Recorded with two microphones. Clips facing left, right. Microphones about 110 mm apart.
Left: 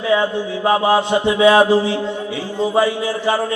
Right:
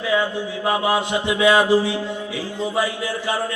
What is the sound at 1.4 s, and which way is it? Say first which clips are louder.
Speech: left 4 dB; 35° left (ahead or behind).